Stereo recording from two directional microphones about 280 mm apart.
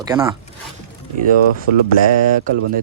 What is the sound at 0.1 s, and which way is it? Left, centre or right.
Speech, centre.